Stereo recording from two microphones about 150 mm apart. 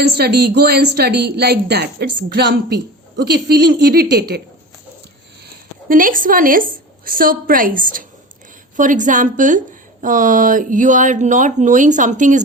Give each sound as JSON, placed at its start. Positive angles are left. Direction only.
{"t": 0.2, "sound": "a woman's voice", "side_deg": -90}
{"t": 5.9, "sound": "a woman's voice", "side_deg": -65}